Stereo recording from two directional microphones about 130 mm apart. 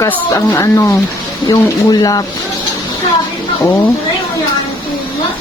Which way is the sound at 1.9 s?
30° left (ahead or behind).